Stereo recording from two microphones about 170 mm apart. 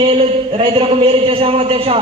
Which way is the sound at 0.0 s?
35° right (ahead or behind).